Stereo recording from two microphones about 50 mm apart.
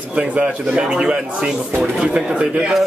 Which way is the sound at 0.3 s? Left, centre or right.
Right.